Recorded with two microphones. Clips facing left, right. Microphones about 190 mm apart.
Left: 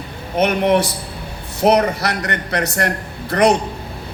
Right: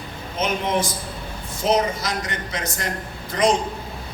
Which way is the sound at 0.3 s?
65° left (ahead or behind).